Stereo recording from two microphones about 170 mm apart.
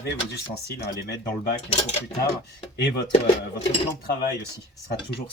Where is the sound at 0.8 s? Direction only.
65° left (ahead or behind).